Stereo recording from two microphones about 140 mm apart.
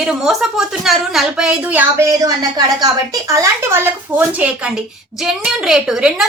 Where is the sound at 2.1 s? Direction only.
25° right (ahead or behind).